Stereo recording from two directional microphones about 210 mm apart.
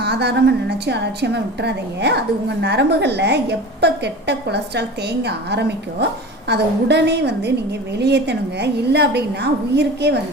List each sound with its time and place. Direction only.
0.0 s a woman's voice: 50° right (ahead or behind)